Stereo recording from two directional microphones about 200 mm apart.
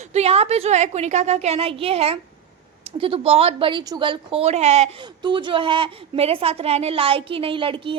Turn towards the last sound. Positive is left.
turn(degrees=-25)  # may be behind; listen again after turning